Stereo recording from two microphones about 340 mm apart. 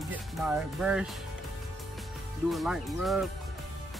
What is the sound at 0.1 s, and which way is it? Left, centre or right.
Speech, centre.